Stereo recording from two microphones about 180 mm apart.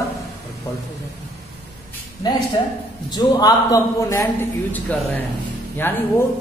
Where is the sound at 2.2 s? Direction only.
25° left (ahead or behind).